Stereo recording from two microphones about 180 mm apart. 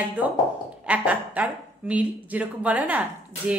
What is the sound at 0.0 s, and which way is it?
A woman's voice, 10° right (ahead or behind).